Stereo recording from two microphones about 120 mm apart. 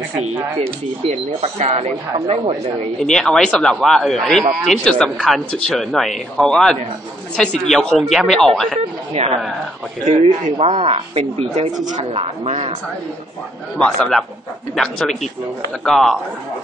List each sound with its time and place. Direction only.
0.6 s speech: 60° right (ahead or behind)
2.1 s speech: 50° right (ahead or behind)
3.0 s speech: 5° left (ahead or behind)
9.1 s speech: 60° right (ahead or behind)
10.0 s speech: 70° right (ahead or behind)
13.7 s speech: 5° left (ahead or behind)